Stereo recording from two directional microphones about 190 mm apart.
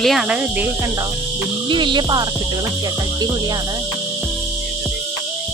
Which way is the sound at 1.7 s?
25° right (ahead or behind).